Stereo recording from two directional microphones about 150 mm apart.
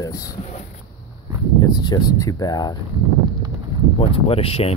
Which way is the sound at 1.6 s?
25° left (ahead or behind).